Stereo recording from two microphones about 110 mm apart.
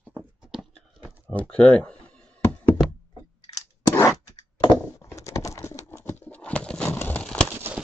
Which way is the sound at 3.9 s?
30° left (ahead or behind).